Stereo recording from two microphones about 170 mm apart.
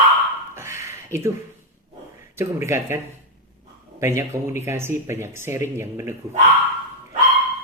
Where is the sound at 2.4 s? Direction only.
15° right (ahead or behind).